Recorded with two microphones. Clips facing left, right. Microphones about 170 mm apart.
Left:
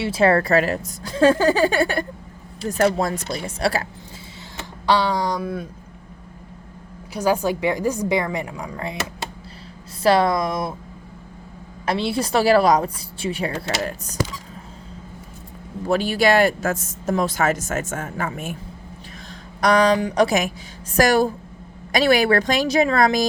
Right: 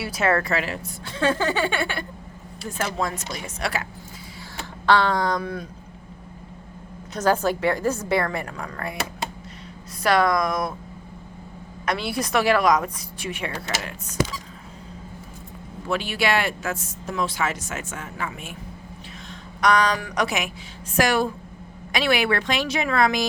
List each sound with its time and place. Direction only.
0.0 s a woman's voice: 30° left (ahead or behind); by 2.8 s 50° left (ahead or behind)
3.0 s a woman's voice: 35° left (ahead or behind)
4.9 s a woman's voice: 15° left (ahead or behind)
7.1 s a woman's voice: 10° left (ahead or behind)
10.0 s speech: 30° left (ahead or behind)
11.9 s a woman's voice: 25° left (ahead or behind)
15.9 s speech: 40° left (ahead or behind)
19.3 s a sound: 35° left (ahead or behind)
20.0 s speech: 20° left (ahead or behind)
20.2 s a woman's voice: 40° left (ahead or behind)